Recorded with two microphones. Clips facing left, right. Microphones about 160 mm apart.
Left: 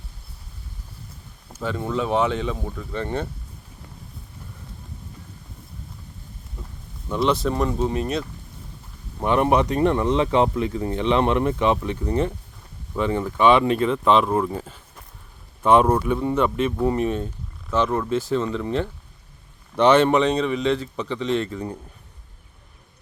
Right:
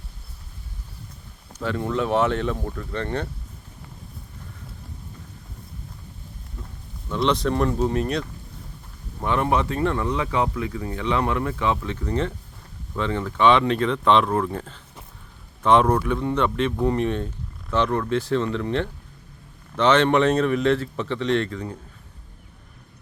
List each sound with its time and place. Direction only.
1.5 s a man's voice: 5° left (ahead or behind)
6.6 s a sound: 10° left (ahead or behind)
7.1 s a man's voice: 5° left (ahead or behind)
9.2 s a man's voice: 20° left (ahead or behind)